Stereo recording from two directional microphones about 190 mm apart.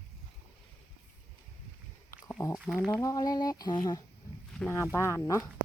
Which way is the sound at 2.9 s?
15° left (ahead or behind).